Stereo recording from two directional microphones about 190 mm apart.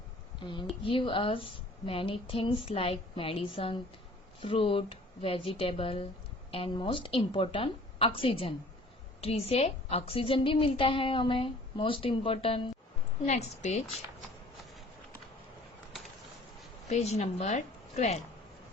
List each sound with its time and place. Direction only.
0.9 s a woman's voice: 25° left (ahead or behind)
16.9 s a woman's voice: 35° left (ahead or behind)